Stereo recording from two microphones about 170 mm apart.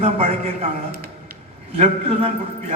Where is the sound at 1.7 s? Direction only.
35° right (ahead or behind).